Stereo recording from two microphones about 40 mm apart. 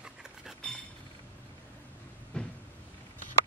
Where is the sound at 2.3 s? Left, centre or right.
Left.